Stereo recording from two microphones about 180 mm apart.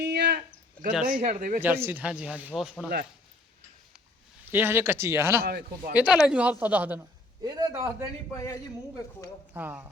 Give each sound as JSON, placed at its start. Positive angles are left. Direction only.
{"t": 0.0, "sound": "a sound", "side_deg": -65}
{"t": 1.2, "sound": "speech", "side_deg": -45}
{"t": 1.6, "sound": "speech", "side_deg": -10}
{"t": 4.5, "sound": "speech", "side_deg": -10}
{"t": 5.4, "sound": "speech", "side_deg": -60}
{"t": 5.9, "sound": "speech", "side_deg": -5}
{"t": 9.5, "sound": "speech", "side_deg": -10}